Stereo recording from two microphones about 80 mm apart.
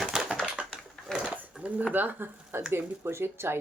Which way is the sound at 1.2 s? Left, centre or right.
Centre.